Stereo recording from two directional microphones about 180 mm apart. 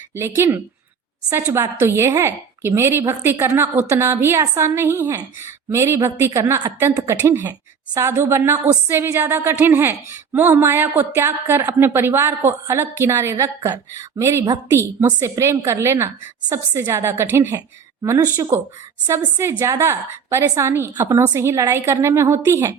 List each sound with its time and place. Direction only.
0.2 s a woman's voice: 15° right (ahead or behind)